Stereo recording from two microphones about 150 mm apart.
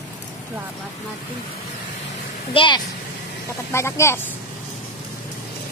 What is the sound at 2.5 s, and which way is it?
Speech, 35° left (ahead or behind).